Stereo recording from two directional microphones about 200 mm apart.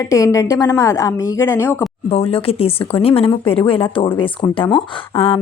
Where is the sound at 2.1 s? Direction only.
30° left (ahead or behind).